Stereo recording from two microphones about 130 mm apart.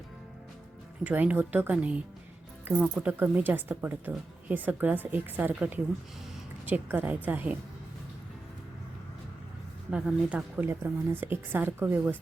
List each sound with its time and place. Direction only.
1.0 s speech: 10° right (ahead or behind)
9.9 s speech: 10° right (ahead or behind)